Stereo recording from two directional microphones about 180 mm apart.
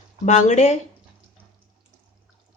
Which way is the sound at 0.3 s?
40° left (ahead or behind).